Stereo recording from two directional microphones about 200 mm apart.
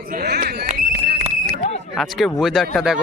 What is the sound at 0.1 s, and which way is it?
Speech, 55° right (ahead or behind).